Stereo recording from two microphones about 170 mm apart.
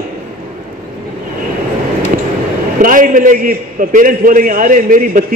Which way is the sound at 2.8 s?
55° right (ahead or behind).